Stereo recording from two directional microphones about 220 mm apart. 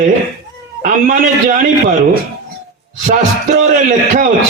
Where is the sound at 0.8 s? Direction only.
40° right (ahead or behind).